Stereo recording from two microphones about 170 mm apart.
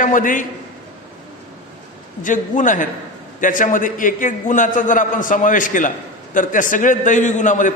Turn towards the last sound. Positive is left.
turn(degrees=50)  # may be behind; listen again after turning